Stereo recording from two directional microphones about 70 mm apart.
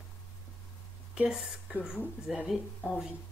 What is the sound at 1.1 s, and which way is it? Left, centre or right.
Speech, centre.